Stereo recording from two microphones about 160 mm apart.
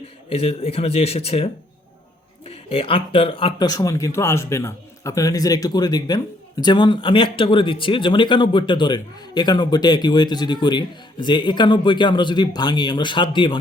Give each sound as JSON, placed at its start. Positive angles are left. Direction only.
{"t": 0.3, "sound": "speech", "side_deg": 35}
{"t": 3.7, "sound": "a man's voice", "side_deg": 20}